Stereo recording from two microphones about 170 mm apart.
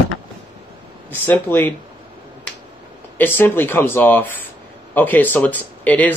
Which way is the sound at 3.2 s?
10° left (ahead or behind).